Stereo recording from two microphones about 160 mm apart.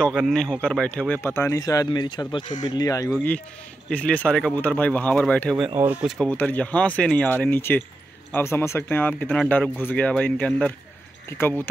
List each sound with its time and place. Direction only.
0.0 s speech: centre (ahead or behind); by 3.1 s 25° left (ahead or behind)
3.9 s speech: 10° left (ahead or behind)
5.8 s speech: 5° right (ahead or behind)
6.2 s speech: 10° left (ahead or behind)